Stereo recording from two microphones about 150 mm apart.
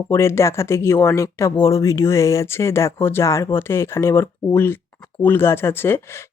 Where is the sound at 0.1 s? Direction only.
20° left (ahead or behind).